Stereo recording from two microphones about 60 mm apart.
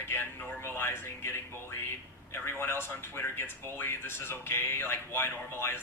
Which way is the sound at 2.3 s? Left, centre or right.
Left.